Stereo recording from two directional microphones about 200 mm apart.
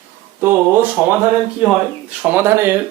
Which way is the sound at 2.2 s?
10° right (ahead or behind).